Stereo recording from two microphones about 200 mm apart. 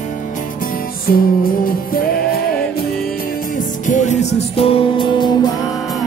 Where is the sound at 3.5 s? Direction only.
40° left (ahead or behind); by 5.3 s 25° left (ahead or behind).